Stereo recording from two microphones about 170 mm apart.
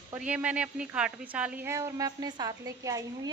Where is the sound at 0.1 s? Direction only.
10° right (ahead or behind).